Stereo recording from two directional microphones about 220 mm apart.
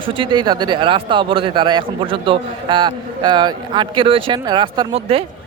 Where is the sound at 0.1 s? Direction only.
20° right (ahead or behind).